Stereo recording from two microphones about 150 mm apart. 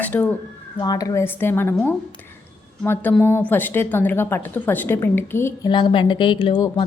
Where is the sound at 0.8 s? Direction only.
25° left (ahead or behind).